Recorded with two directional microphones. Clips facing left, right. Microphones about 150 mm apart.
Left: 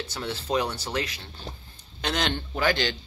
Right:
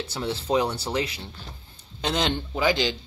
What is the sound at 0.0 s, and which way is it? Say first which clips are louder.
Speech: right 3 dB; 30° right (ahead or behind).